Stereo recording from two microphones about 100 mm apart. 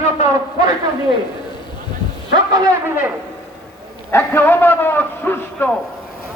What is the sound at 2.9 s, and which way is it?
Speech, 15° right (ahead or behind).